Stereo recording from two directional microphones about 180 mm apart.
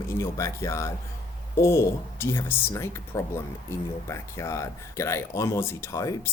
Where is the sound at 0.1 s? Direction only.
15° left (ahead or behind).